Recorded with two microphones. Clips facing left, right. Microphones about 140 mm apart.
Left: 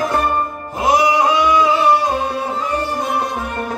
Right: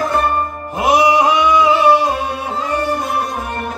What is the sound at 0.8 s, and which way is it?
Music, 20° right (ahead or behind).